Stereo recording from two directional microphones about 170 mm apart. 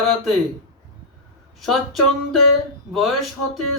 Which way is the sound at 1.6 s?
Centre (ahead or behind).